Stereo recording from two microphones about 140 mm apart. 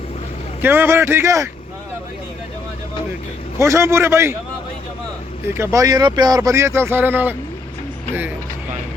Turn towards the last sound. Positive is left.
turn(degrees=-15)  # may be behind; listen again after turning